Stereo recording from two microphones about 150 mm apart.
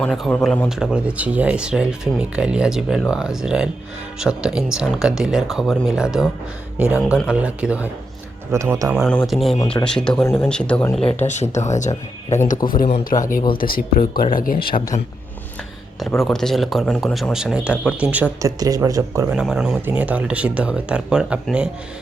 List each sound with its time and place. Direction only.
0.0 s a man's voice: 5° left (ahead or behind)
0.8 s speech: 5° right (ahead or behind)
8.5 s speech: 20° right (ahead or behind)
8.9 s speech: 5° right (ahead or behind)
10.2 s a man's voice: 15° left (ahead or behind)
10.5 s a man's voice: 5° left (ahead or behind)
11.0 s speech: 50° left (ahead or behind)
12.6 s speech: 70° left (ahead or behind)
13.5 s speech: 75° left (ahead or behind)
16.0 s speech: centre (ahead or behind)
18.4 s speech: 20° right (ahead or behind)
19.3 s speech: 5° right (ahead or behind)